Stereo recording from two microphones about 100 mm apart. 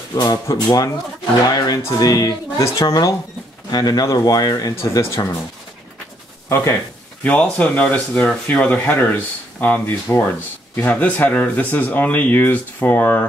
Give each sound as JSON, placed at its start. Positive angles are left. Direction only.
{"t": 0.1, "sound": "speech", "side_deg": 35}
{"t": 6.5, "sound": "speech", "side_deg": 25}
{"t": 7.2, "sound": "speech", "side_deg": 15}